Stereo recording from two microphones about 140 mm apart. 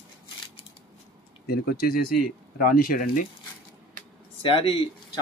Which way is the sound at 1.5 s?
90° left.